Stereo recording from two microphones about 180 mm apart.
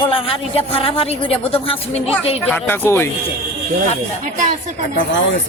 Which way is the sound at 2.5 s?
10° left (ahead or behind).